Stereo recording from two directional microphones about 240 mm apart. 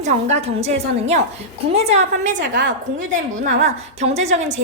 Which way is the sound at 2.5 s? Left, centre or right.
Right.